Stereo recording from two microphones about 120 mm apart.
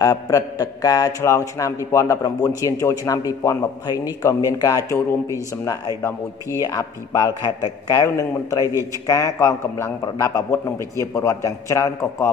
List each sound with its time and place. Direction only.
0.0 s a man's voice: 30° left (ahead or behind)